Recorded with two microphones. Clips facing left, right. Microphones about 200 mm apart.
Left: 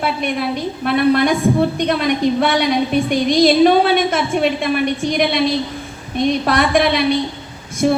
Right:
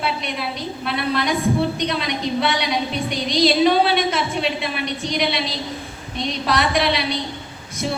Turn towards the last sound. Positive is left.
turn(degrees=55)  # may be behind; listen again after turning